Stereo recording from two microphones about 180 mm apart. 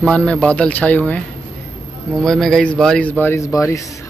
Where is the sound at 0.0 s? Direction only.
5° left (ahead or behind).